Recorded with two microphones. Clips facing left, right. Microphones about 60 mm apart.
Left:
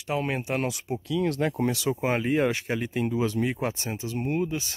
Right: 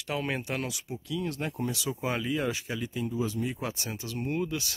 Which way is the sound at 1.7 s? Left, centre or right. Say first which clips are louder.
Left 6 dB; left.